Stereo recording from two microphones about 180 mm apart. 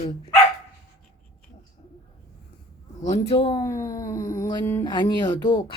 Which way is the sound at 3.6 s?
15° left (ahead or behind).